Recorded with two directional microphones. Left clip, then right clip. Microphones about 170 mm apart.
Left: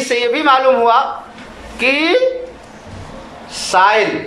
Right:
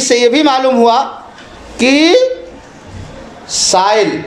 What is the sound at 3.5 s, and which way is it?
Speech, 25° right (ahead or behind).